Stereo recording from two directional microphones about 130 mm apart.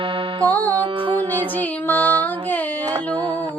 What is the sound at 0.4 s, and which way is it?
Music, 15° left (ahead or behind).